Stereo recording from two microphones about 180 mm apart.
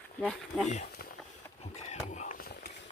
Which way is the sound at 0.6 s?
40° left (ahead or behind).